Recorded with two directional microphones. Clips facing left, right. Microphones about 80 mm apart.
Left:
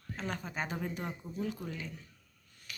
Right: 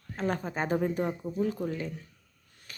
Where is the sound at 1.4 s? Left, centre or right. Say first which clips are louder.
Right 8 dB; right.